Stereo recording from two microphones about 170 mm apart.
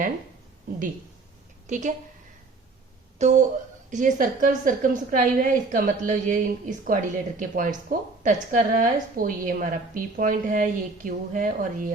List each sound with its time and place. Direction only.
1.6 s a woman's voice: 45° right (ahead or behind)
3.2 s a woman's voice: 45° right (ahead or behind)